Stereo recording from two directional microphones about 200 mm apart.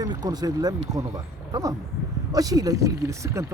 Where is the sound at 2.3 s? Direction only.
15° right (ahead or behind).